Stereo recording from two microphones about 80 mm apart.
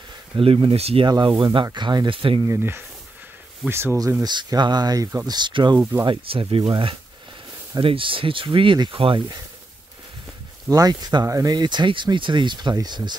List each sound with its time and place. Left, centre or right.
0.6 s speech: right
2.4 s speech: right
4.2 s speech: right
5.8 s speech: right
6.0 s speech: right
10.7 s speech: right
11.2 s speech: right
11.5 s speech: right